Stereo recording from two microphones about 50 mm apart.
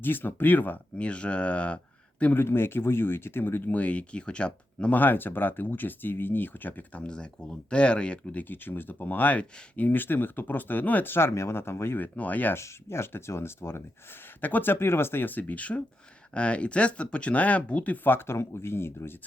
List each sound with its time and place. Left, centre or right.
0.0 s speech: left
0.9 s speech: left
2.3 s speech: left
3.7 s speech: left
4.9 s speech: left
8.4 s speech: left
12.1 s speech: left
12.5 s speech: left
14.4 s speech: left
18.3 s speech: left